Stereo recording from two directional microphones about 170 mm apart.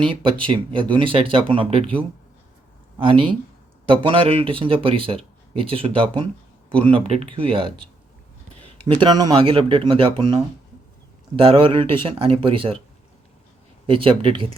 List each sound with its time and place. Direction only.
0.0 s speech: 30° right (ahead or behind)
3.0 s speech: 30° right (ahead or behind)
8.9 s speech: 25° right (ahead or behind)
11.3 s speech: 30° right (ahead or behind)
13.8 s speech: 30° right (ahead or behind)